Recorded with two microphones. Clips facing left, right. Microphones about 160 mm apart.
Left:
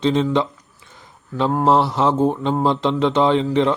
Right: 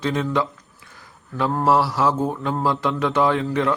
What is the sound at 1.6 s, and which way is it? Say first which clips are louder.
Speech: left 2 dB; 20° left (ahead or behind).